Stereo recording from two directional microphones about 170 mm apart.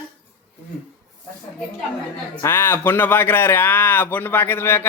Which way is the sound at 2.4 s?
15° left (ahead or behind).